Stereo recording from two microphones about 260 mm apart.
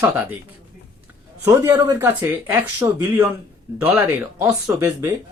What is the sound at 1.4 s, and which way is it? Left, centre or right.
Speech, centre.